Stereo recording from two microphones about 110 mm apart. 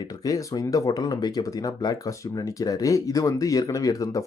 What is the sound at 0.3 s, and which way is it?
Speech, 30° left (ahead or behind).